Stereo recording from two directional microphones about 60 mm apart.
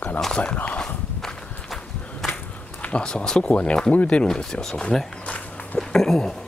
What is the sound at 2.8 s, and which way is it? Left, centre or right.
Speech, centre.